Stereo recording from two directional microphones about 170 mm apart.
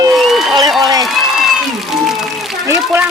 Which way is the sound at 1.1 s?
Centre (ahead or behind).